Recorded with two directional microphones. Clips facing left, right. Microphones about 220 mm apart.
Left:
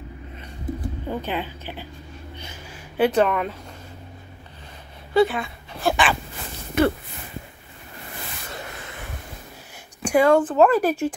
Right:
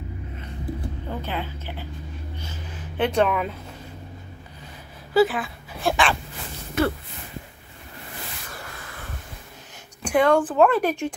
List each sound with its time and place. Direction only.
0.7 s speech: 15° left (ahead or behind)
3.0 s speech: 5° left (ahead or behind)
5.1 s speech: centre (ahead or behind)
8.6 s a sound: 20° left (ahead or behind)
10.0 s speech: 5° left (ahead or behind)